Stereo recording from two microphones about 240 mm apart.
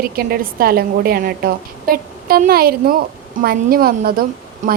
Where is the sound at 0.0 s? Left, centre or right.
Right.